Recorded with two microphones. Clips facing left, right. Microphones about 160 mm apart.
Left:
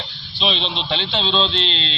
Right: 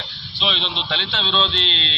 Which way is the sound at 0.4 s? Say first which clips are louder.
Left 3 dB; 30° left (ahead or behind).